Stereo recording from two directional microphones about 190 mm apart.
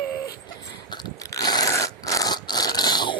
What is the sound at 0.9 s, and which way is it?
Biting, 20° left (ahead or behind).